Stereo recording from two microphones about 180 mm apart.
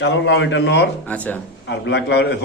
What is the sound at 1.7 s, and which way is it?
Speech, 80° left.